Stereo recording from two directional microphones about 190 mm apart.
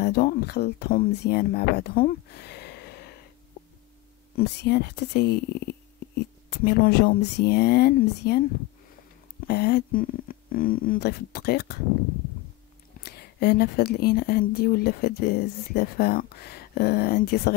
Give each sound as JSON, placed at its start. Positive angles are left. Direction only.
{"t": 0.0, "sound": "speech", "side_deg": 55}
{"t": 4.4, "sound": "speech", "side_deg": 60}
{"t": 9.5, "sound": "speech", "side_deg": 55}
{"t": 13.0, "sound": "speech", "side_deg": 55}